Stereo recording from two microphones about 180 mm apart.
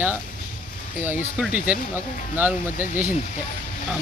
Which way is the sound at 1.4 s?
5° right (ahead or behind).